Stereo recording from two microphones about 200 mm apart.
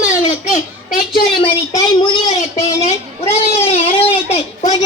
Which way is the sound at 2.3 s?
35° left (ahead or behind).